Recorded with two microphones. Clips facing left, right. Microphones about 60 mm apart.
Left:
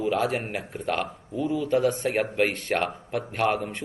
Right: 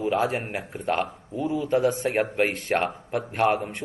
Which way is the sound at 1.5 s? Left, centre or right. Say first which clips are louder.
Right 1 dB; right.